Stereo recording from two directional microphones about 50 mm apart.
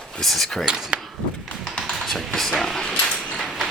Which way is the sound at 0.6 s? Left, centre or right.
Centre.